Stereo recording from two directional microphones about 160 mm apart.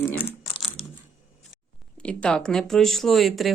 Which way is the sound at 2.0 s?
5° left (ahead or behind).